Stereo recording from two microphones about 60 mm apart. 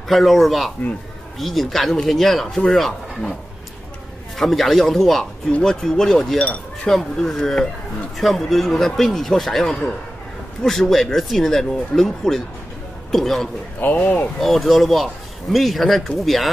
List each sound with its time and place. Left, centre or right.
0.1 s speech: centre
4.4 s speech: centre
6.3 s speech: left
6.9 s speech: centre
13.7 s speech: left
14.4 s speech: centre